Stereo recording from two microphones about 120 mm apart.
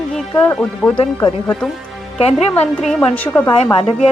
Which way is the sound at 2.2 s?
60° left (ahead or behind).